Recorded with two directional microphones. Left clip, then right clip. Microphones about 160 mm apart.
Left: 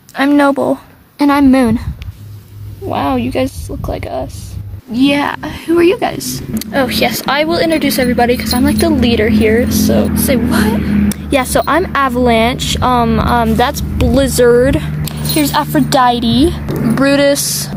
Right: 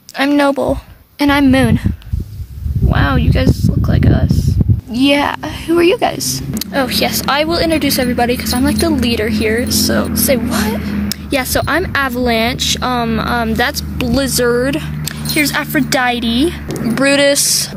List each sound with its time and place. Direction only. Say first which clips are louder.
0.2 s a woman's voice: left 2 dB; 5° right (ahead or behind)
2.9 s a woman's voice: left 2 dB; 5° right (ahead or behind)
4.9 s a woman's voice: even; 20° right (ahead or behind)